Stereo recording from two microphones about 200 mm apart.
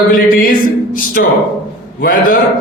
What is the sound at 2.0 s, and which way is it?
Speech, 45° left (ahead or behind).